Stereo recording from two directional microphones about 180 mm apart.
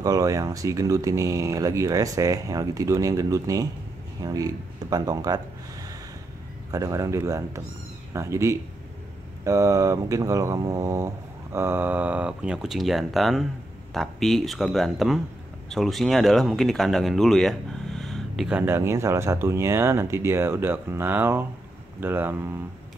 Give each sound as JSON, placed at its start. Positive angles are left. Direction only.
{"t": 0.0, "sound": "speech", "side_deg": -20}